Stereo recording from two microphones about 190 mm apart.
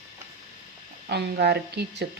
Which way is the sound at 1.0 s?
60° right (ahead or behind).